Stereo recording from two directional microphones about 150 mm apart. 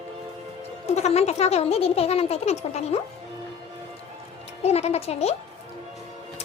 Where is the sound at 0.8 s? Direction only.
45° left (ahead or behind).